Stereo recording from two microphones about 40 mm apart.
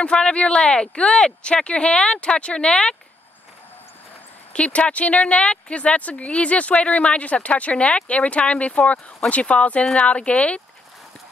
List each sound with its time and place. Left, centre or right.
0.0 s speech: left
4.5 s speech: left